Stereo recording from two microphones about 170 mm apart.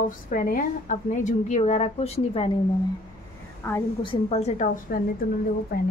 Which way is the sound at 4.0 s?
35° left (ahead or behind).